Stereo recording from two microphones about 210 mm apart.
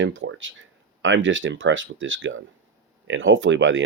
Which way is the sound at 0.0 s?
65° right (ahead or behind).